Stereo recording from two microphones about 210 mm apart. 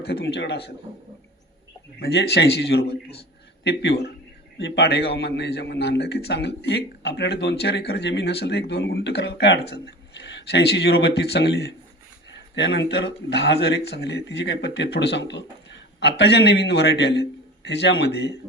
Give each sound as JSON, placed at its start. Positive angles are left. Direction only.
{"t": 0.0, "sound": "a man's voice", "side_deg": 50}
{"t": 2.0, "sound": "a man's voice", "side_deg": 50}